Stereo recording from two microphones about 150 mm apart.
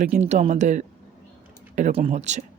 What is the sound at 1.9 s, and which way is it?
Speech, 40° right (ahead or behind).